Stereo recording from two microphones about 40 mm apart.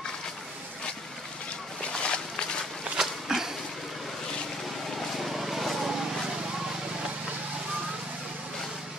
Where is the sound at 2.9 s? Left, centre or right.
Centre.